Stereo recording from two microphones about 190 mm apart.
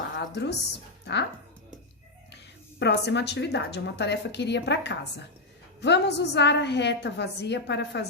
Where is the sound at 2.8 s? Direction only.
65° left (ahead or behind).